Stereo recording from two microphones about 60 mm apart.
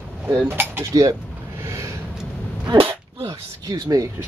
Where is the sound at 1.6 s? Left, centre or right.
Right.